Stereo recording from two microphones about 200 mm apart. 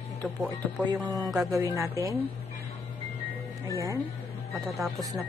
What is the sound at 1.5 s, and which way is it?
Speech, 15° right (ahead or behind).